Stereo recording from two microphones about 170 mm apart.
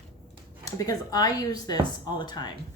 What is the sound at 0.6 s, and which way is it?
Speech, 20° left (ahead or behind).